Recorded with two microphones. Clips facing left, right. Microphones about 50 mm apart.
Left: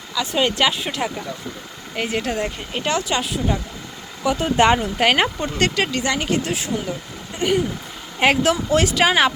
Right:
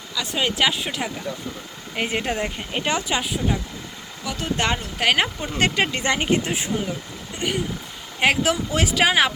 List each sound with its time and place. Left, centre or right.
0.1 s speech: centre
2.0 s speech: right
4.2 s speech: centre
5.0 s speech: centre
5.5 s speech: centre
7.3 s speech: centre